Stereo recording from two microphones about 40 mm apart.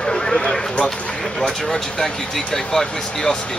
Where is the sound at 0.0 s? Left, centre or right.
Centre.